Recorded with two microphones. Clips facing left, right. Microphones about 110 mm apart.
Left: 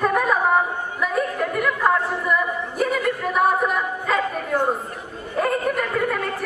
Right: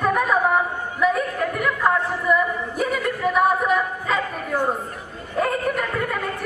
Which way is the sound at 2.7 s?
Centre (ahead or behind).